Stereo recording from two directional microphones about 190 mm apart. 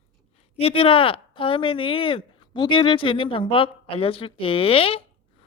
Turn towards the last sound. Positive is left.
turn(degrees=30)  # may be behind; listen again after turning